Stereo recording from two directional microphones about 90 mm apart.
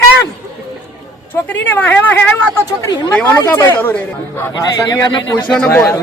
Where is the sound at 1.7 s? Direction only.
20° left (ahead or behind).